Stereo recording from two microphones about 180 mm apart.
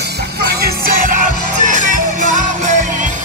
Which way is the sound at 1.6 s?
45° right (ahead or behind).